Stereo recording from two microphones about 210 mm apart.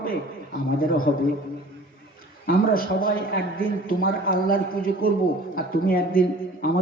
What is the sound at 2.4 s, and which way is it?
A man's voice, 45° left (ahead or behind).